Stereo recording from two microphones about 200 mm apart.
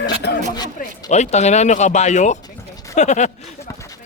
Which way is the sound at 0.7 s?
35° left (ahead or behind).